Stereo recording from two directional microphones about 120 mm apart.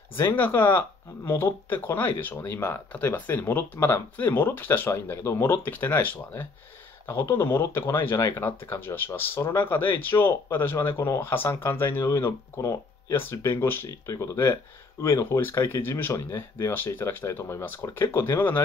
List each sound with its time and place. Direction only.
0.1 s speech: 15° left (ahead or behind)